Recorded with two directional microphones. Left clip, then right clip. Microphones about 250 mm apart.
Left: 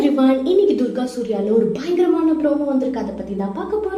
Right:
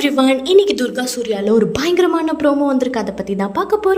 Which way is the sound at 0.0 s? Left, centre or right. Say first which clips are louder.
Right 2 dB; right.